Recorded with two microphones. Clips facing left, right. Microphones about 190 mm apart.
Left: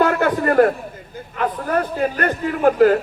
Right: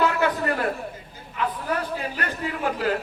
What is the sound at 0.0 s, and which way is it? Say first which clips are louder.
A man's voice: left 5 dB; 50° left (ahead or behind).